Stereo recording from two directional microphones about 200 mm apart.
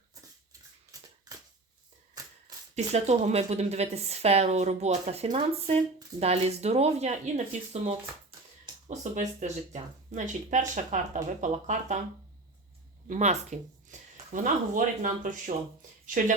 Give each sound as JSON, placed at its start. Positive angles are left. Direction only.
{"t": 0.9, "sound": "scissors", "side_deg": -20}
{"t": 2.2, "sound": "a sound", "side_deg": -20}
{"t": 2.7, "sound": "a woman's voice", "side_deg": -35}
{"t": 13.1, "sound": "a woman's voice", "side_deg": -35}
{"t": 13.9, "sound": "a sound", "side_deg": -35}
{"t": 14.3, "sound": "a woman's voice", "side_deg": -40}